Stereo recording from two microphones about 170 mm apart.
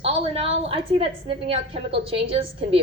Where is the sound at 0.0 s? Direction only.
35° right (ahead or behind).